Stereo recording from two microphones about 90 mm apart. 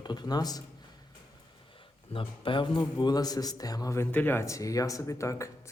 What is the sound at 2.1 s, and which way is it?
A man's voice, 75° left (ahead or behind).